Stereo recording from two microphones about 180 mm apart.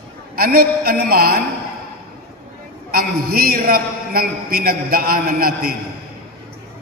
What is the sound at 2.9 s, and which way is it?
A man's voice, 55° right (ahead or behind).